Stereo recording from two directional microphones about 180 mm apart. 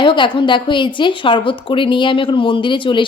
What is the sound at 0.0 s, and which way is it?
A woman's voice, 25° left (ahead or behind).